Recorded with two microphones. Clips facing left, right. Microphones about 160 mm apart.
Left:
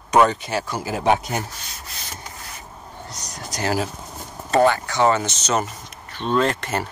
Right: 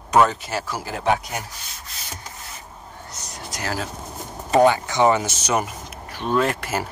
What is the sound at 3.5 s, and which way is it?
Speech, 40° left (ahead or behind).